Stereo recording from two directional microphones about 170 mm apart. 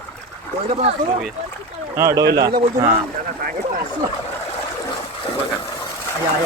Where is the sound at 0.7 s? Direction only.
35° right (ahead or behind).